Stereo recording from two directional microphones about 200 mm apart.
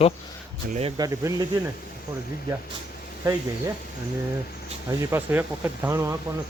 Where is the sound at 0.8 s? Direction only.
25° right (ahead or behind).